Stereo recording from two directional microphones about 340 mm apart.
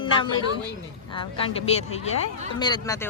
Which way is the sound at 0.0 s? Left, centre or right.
Centre.